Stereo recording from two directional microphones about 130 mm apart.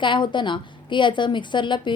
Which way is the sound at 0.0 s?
40° left (ahead or behind).